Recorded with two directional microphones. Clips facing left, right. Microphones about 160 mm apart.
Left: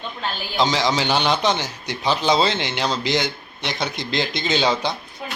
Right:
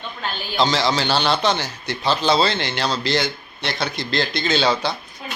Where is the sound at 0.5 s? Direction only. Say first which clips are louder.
Right 1 dB; 15° left (ahead or behind).